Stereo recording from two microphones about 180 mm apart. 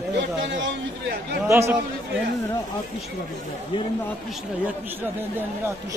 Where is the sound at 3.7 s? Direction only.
25° left (ahead or behind).